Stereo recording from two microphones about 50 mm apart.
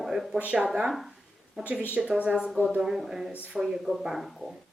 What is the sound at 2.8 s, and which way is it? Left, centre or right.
Speech, centre.